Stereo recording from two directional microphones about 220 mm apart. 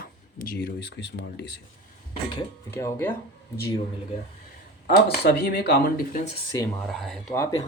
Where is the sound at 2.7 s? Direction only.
10° left (ahead or behind).